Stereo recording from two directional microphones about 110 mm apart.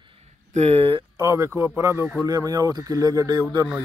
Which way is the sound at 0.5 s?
70° right (ahead or behind).